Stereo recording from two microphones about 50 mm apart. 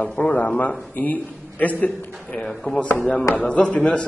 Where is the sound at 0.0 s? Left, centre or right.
Left.